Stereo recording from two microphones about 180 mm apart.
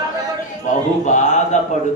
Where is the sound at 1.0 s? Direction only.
40° left (ahead or behind).